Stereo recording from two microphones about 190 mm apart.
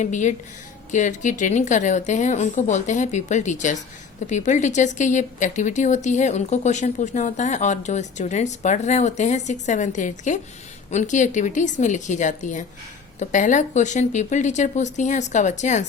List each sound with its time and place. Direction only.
0.0 s a woman's voice: 40° left (ahead or behind)